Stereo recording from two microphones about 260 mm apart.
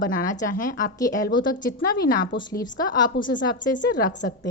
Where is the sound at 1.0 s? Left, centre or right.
Centre.